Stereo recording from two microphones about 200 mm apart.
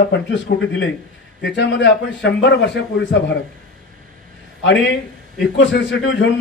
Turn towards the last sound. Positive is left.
turn(degrees=60)  # may be behind; listen again after turning